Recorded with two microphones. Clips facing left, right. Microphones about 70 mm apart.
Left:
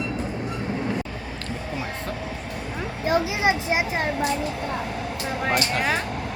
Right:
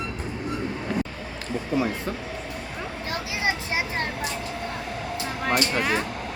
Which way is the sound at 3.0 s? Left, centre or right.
Centre.